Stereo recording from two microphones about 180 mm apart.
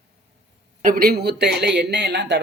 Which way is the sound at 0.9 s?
55° right (ahead or behind).